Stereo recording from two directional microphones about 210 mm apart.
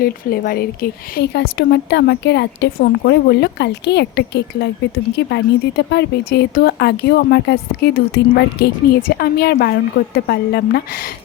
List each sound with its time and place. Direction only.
0.0 s speech: 45° left (ahead or behind)